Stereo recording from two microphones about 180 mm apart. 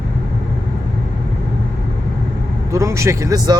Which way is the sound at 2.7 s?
15° right (ahead or behind).